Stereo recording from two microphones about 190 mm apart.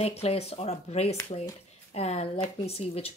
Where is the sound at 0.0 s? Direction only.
35° left (ahead or behind).